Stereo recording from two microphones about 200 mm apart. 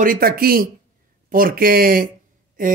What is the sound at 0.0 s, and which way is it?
A man's voice, 45° right (ahead or behind).